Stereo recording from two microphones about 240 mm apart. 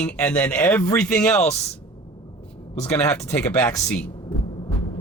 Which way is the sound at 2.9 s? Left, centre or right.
Centre.